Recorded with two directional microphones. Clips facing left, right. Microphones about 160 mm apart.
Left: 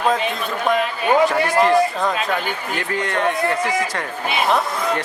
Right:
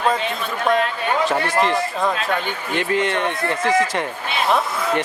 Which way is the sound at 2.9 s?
20° right (ahead or behind).